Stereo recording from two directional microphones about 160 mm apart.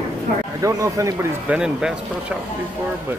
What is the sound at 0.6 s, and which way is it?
Speech, 20° right (ahead or behind).